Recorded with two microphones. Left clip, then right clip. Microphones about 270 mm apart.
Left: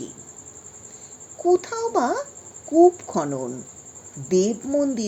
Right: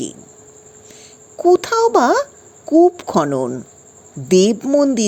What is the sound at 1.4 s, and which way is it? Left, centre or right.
Speech, right.